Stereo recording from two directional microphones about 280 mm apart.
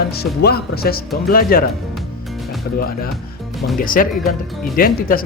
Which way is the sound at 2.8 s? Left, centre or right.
Left.